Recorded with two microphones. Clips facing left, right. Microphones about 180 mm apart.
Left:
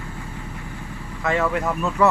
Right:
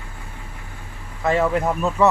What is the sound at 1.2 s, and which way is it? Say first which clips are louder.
Speech: right 3 dB; 30° right (ahead or behind).